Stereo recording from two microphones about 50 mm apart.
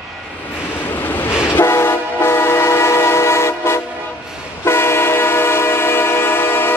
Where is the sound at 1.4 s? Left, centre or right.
Left.